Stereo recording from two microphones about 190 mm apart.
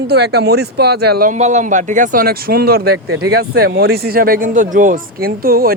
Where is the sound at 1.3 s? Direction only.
40° right (ahead or behind).